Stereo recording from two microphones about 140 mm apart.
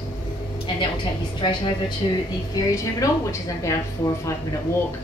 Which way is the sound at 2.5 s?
20° left (ahead or behind).